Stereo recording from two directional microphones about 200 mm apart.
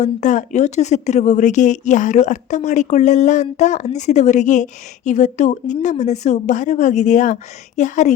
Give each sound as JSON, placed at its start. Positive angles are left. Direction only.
{"t": 0.0, "sound": "speech", "side_deg": 35}